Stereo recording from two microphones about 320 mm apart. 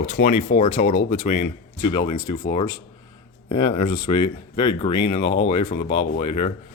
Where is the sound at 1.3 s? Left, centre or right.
Left.